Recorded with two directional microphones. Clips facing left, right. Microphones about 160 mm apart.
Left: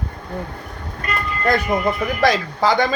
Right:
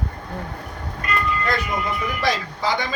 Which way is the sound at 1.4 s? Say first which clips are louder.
Left 6 dB; 50° left (ahead or behind).